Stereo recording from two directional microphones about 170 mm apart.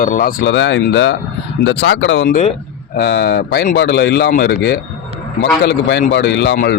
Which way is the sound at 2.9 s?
75° left (ahead or behind).